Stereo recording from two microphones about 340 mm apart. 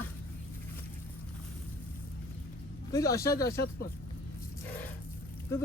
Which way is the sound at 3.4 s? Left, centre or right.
Left.